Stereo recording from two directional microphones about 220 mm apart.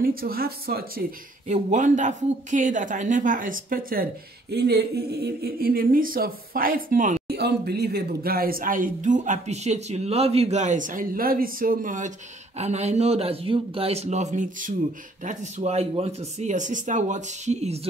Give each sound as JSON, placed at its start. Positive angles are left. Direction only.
{"t": 0.0, "sound": "speech", "side_deg": -40}